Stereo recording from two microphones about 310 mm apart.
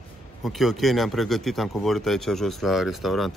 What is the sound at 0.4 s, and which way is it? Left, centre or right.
Speech, centre.